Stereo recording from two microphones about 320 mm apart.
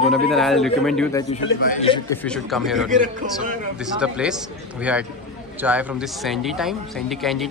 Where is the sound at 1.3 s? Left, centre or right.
Left.